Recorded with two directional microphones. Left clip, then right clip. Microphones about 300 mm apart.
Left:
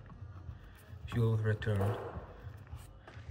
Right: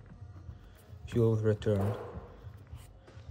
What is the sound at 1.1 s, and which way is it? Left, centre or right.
Speech, centre.